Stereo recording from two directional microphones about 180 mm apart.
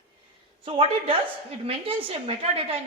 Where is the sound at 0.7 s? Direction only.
30° right (ahead or behind).